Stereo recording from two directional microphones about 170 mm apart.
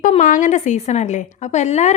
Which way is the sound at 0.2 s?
50° left (ahead or behind).